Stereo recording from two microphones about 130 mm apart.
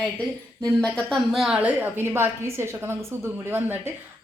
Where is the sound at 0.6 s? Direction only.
10° left (ahead or behind); by 3.8 s 20° right (ahead or behind).